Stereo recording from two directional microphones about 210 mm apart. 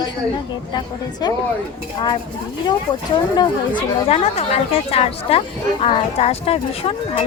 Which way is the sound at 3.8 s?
25° left (ahead or behind).